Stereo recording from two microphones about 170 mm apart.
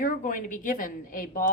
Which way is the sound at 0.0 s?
55° left (ahead or behind).